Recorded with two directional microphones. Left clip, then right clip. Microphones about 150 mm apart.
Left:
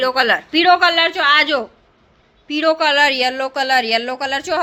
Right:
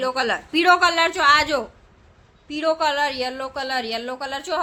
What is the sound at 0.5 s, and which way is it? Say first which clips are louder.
A woman's voice: left 3 dB; centre (ahead or behind).